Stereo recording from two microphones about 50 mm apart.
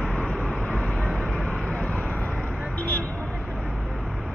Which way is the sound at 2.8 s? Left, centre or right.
Left.